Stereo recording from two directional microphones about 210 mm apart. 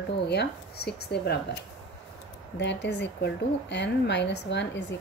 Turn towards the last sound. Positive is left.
turn(degrees=60)  # may be behind; listen again after turning